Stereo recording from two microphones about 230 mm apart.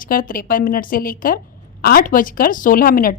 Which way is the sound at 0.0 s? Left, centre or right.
Left.